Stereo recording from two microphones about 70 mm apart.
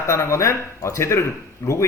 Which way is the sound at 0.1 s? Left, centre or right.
Left.